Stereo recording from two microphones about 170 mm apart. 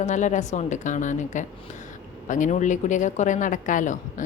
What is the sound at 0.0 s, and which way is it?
Speech, 45° left (ahead or behind).